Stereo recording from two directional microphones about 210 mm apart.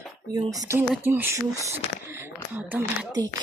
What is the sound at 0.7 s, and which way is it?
Speech, 10° right (ahead or behind).